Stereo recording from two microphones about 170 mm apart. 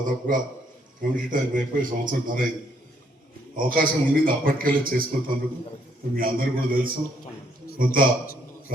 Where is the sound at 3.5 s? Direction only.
55° right (ahead or behind).